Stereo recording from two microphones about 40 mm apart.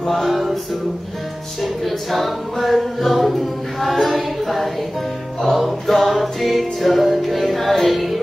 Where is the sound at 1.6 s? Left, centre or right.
Centre.